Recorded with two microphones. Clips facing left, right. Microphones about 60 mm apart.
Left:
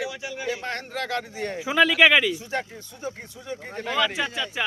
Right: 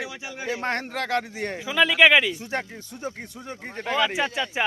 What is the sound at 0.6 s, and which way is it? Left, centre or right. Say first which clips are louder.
Speech: right 3 dB; right.